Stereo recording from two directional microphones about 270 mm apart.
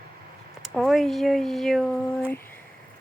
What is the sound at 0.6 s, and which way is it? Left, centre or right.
Speech, centre.